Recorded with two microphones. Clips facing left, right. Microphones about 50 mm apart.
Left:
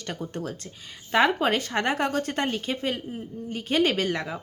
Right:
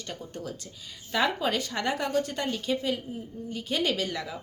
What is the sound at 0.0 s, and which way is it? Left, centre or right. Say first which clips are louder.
A woman's voice: left 5 dB; left.